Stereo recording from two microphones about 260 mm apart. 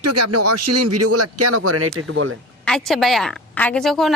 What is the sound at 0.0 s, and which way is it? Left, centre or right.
A man's voice, right.